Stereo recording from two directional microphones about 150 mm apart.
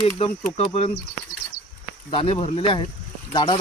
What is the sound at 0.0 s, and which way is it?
Speech, 40° left (ahead or behind).